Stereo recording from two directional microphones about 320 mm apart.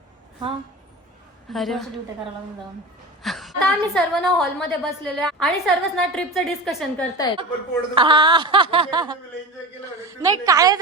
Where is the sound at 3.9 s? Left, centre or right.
Centre.